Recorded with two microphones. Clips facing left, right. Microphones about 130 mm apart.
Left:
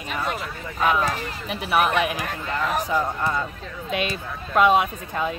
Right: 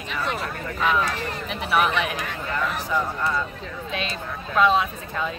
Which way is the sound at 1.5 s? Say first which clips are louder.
Left 1 dB; 5° left (ahead or behind).